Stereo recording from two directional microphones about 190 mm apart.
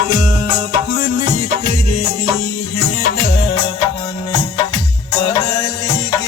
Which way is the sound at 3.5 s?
25° left (ahead or behind).